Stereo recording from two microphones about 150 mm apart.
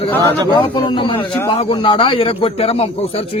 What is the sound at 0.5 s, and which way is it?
A man's voice, 35° left (ahead or behind).